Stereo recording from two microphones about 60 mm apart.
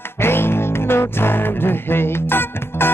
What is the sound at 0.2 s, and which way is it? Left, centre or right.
Music, left.